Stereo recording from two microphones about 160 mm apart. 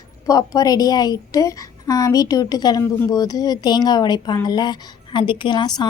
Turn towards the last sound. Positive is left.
turn(degrees=25)  # may be behind; listen again after turning